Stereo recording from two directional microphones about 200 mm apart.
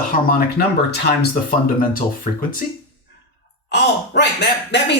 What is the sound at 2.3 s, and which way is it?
Speech, 40° left (ahead or behind).